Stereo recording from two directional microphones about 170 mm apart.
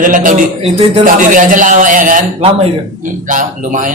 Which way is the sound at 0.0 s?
50° right (ahead or behind).